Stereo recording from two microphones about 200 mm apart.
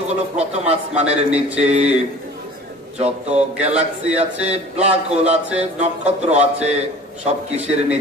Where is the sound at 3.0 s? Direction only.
35° right (ahead or behind).